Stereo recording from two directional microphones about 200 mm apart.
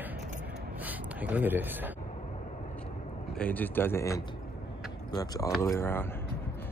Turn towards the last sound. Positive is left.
turn(degrees=10)  # may be behind; listen again after turning